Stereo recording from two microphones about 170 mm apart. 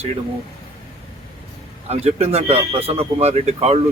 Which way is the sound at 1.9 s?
40° right (ahead or behind).